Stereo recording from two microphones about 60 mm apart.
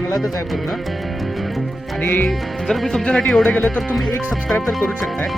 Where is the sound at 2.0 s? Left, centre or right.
Left.